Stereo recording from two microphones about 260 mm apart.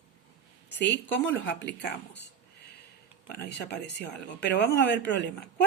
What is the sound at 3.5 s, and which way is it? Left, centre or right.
A woman's voice, left.